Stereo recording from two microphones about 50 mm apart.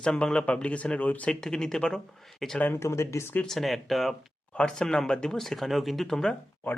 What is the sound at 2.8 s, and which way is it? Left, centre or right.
Speech, left.